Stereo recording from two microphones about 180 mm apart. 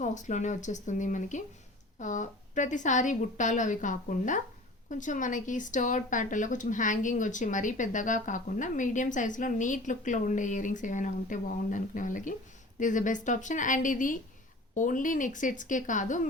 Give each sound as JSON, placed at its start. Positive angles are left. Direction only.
{"t": 0.0, "sound": "speech", "side_deg": 40}